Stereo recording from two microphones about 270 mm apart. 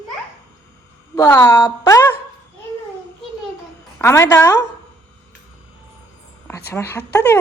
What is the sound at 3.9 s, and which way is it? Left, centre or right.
Speech, centre.